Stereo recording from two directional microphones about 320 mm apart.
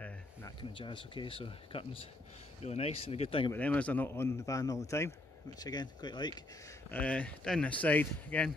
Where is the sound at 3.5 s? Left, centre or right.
Centre.